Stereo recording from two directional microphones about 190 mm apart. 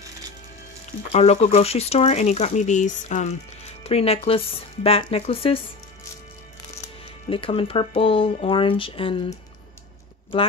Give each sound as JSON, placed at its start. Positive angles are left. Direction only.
{"t": 1.1, "sound": "speech", "side_deg": 35}
{"t": 7.2, "sound": "speech", "side_deg": 30}